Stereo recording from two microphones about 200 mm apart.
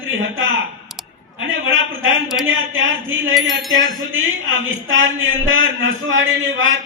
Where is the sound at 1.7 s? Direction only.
75° right (ahead or behind).